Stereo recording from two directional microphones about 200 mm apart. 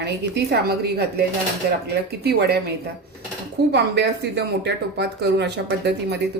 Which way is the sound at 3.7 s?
55° right (ahead or behind).